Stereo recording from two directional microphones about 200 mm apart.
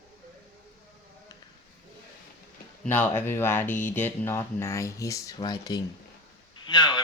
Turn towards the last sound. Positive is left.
turn(degrees=20)  # may be behind; listen again after turning